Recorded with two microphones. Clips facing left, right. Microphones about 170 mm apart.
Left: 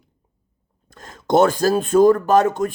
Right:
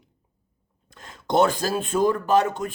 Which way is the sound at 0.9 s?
45° left (ahead or behind).